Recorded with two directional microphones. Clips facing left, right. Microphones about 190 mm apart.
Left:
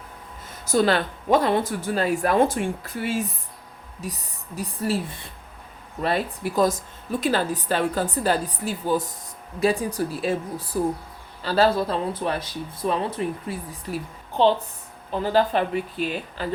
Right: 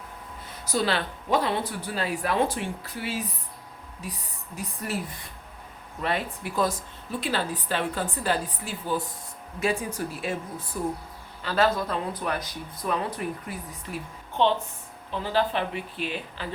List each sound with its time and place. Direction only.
0.6 s speech: 50° left (ahead or behind)
4.8 s speech: 30° left (ahead or behind)
6.0 s a woman's voice: 40° left (ahead or behind)